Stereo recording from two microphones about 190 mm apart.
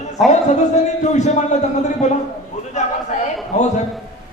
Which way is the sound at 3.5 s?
35° left (ahead or behind).